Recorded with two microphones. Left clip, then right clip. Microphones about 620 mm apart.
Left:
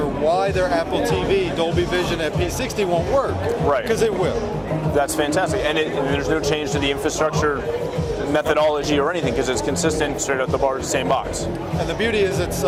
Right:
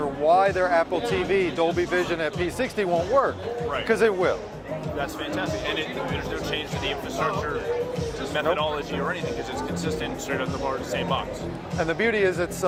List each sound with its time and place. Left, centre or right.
0.3 s speech: right
3.8 s speech: right
4.9 s speech: left
9.8 s speech: left
12.0 s speech: right